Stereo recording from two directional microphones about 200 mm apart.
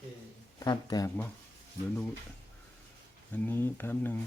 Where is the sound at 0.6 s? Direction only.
20° left (ahead or behind).